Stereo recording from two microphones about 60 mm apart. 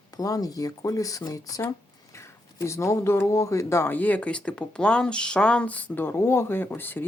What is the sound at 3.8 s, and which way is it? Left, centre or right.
Speech, left.